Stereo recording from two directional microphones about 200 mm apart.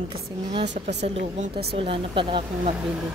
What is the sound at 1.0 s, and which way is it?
Speech, 30° right (ahead or behind).